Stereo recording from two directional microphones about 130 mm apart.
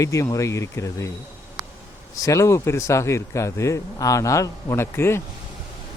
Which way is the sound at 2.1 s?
25° left (ahead or behind).